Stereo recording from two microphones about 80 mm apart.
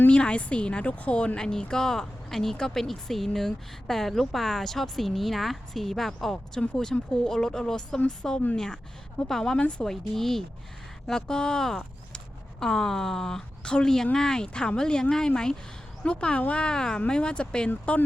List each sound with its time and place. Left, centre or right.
0.1 s a woman's voice: centre